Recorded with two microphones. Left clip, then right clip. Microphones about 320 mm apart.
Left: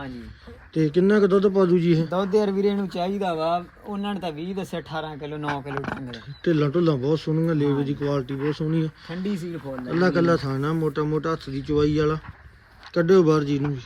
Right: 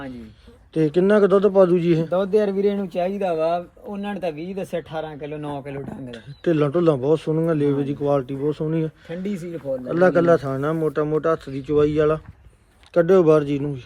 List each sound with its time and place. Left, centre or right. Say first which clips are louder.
0.7 s a man's voice: right 3 dB; centre
2.0 s speech: right 3 dB; centre
6.1 s a man's voice: right 4 dB; centre